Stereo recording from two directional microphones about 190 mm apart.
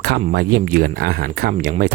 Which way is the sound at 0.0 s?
55° right (ahead or behind).